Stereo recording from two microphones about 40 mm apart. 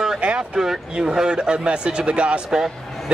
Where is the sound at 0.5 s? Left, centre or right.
Centre.